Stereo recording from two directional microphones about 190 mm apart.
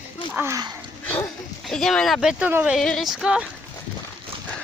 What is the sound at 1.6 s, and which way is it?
Speech, centre (ahead or behind).